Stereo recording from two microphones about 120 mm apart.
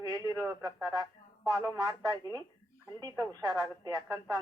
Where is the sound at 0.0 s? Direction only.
35° right (ahead or behind).